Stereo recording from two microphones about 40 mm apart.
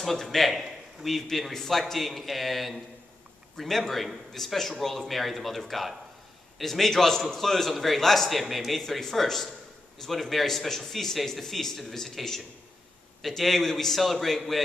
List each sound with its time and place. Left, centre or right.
0.0 s a man's voice: centre